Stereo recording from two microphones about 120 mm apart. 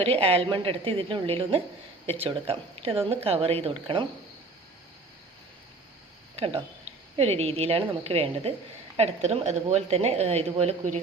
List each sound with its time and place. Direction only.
0.0 s speech: 55° right (ahead or behind)
6.3 s a woman's voice: 55° right (ahead or behind); by 11.0 s 75° right (ahead or behind)